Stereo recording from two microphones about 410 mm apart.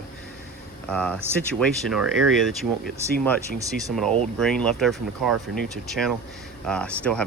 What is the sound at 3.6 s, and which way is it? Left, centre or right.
Speech, centre.